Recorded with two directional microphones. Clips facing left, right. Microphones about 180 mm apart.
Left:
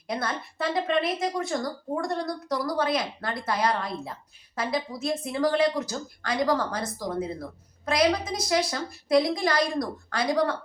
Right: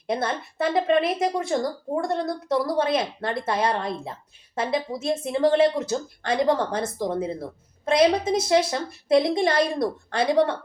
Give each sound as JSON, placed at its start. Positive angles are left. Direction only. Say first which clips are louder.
{"t": 0.1, "sound": "a woman's voice", "louder": "right 4 dB", "side_deg": -25}